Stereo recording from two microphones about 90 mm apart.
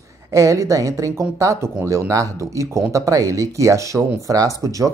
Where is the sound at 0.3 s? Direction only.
35° right (ahead or behind).